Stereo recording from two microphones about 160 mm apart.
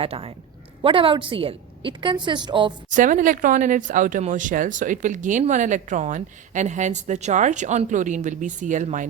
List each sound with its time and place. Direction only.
0.0 s a woman's voice: 35° right (ahead or behind)
2.9 s speech: 55° right (ahead or behind)